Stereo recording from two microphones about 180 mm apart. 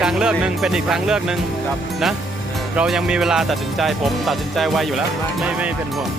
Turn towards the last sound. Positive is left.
turn(degrees=0)  # may be behind; listen again after turning